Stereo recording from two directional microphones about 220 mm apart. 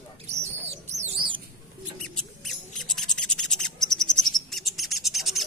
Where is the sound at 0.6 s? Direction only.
30° right (ahead or behind).